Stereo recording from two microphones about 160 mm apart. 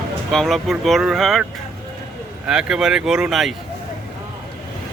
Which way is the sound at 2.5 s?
5° right (ahead or behind).